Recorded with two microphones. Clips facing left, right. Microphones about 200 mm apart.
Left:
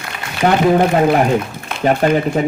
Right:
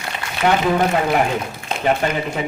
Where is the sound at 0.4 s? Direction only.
40° left (ahead or behind).